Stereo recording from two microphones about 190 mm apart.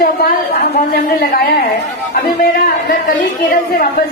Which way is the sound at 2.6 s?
45° left (ahead or behind).